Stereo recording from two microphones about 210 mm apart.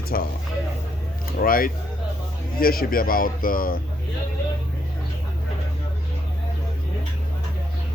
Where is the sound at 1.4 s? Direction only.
45° left (ahead or behind).